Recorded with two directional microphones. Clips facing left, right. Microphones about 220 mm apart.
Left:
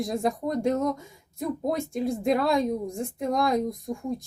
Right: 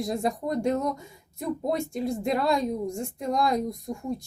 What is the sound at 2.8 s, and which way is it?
A woman's voice, centre (ahead or behind).